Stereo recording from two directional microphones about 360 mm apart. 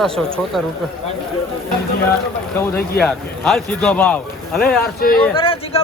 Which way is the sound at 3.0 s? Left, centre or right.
Centre.